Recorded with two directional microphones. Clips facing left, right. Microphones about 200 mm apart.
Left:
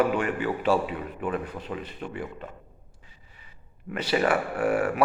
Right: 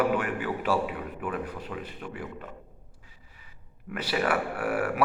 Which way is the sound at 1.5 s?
10° right (ahead or behind).